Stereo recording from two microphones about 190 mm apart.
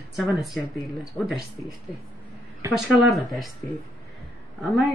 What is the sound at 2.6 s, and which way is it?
Speech, 15° right (ahead or behind).